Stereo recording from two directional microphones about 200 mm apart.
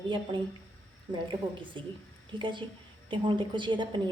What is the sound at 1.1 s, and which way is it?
A woman's voice, 25° right (ahead or behind).